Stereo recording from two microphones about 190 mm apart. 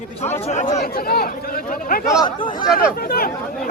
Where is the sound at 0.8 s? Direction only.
50° left (ahead or behind).